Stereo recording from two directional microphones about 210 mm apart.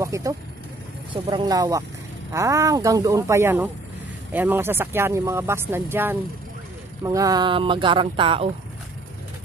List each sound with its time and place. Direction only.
0.0 s speech: 15° right (ahead or behind)